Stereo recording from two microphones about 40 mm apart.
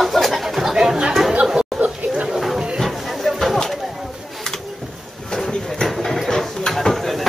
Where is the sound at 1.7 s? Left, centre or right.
Centre.